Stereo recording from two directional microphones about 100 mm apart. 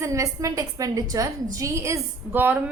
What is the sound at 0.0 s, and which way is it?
A woman's voice, 30° right (ahead or behind).